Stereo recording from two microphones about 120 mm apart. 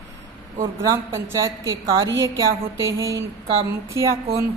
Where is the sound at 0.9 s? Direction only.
20° right (ahead or behind).